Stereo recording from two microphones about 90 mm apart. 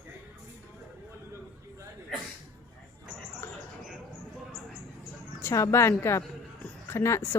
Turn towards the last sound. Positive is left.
turn(degrees=30)  # may be behind; listen again after turning